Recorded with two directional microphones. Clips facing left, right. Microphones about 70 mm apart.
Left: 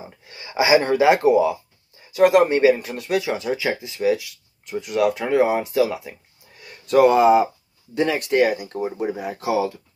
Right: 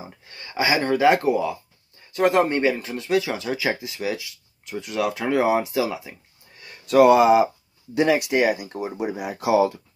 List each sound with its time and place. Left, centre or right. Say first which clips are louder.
0.3 s speech: left 6 dB; centre
3.6 s speech: left 6 dB; centre